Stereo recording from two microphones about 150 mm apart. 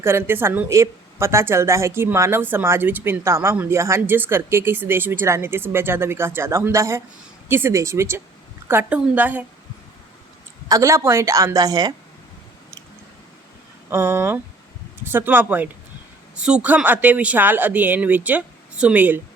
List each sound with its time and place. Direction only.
0.0 s speech: 15° right (ahead or behind)
10.7 s a woman's voice: 20° right (ahead or behind)
13.9 s speech: 15° right (ahead or behind)